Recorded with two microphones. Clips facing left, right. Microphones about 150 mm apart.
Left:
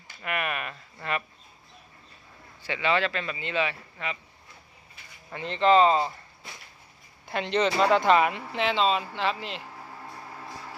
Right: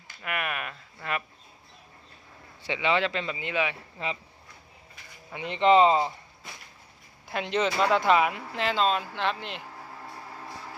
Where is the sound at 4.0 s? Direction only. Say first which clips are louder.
Right 2 dB; 30° right (ahead or behind).